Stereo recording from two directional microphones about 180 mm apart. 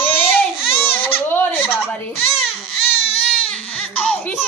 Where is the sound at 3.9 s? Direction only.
5° left (ahead or behind).